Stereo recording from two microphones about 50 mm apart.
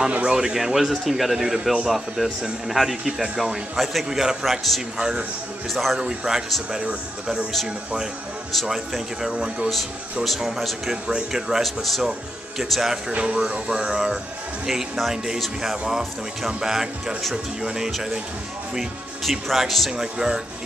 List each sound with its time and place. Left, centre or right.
0.2 s a man's voice: centre
5.7 s speech: centre
5.9 s a man's voice: centre
7.6 s a man's voice: centre
9.3 s speech: right
10.2 s a man's voice: centre
11.6 s speech: centre
13.1 s a man's voice: right; by 19.9 s centre
19.9 s a man's voice: centre